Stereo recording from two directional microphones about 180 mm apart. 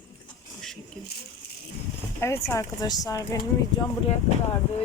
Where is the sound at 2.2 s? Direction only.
15° left (ahead or behind).